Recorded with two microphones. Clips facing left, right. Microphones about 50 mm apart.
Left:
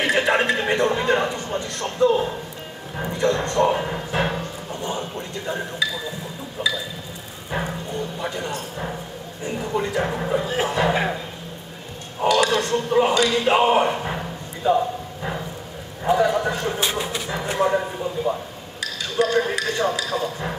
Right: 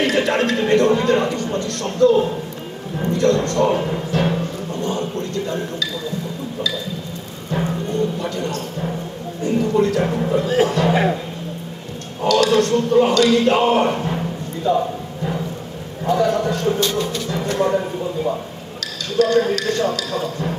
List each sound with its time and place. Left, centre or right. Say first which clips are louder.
0.0 s a man's voice: right 2 dB; centre
7.5 s music: right 4 dB; left
8.2 s a man's voice: right 3 dB; centre
10.9 s a man's voice: right 4 dB; centre
12.2 s a man's voice: right 3 dB; left
14.0 s a sound: right 4 dB; centre
16.0 s a man's voice: right 1 dB; centre
18.8 s a sound: right 4 dB; centre
19.5 s a man's voice: right 3 dB; centre